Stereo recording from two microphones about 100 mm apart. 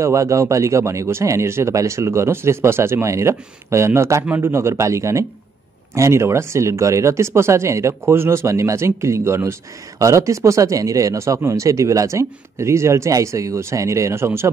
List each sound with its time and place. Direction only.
0.0 s speech: 30° right (ahead or behind)